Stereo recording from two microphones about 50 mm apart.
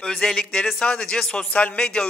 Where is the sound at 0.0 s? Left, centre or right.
Centre.